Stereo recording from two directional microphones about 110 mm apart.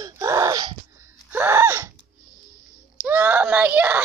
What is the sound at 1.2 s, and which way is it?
Gasp, 20° right (ahead or behind).